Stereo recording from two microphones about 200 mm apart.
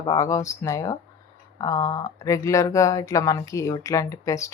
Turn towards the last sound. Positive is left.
turn(degrees=15)  # may be behind; listen again after turning